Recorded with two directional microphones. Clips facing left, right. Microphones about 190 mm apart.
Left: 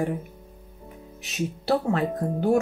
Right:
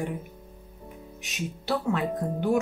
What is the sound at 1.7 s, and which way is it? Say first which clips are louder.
Speech: left 3 dB; 35° left (ahead or behind).